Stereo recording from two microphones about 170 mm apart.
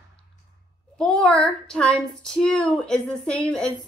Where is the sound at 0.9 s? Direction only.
5° left (ahead or behind).